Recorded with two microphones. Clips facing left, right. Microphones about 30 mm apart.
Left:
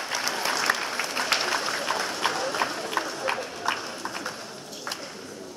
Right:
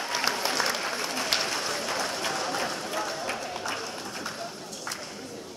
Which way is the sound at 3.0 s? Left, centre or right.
Left.